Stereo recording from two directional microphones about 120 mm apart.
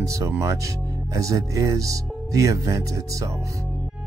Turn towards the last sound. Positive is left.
turn(degrees=-25)  # may be behind; listen again after turning